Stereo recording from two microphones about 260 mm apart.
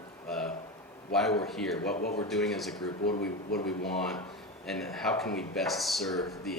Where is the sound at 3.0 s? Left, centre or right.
Left.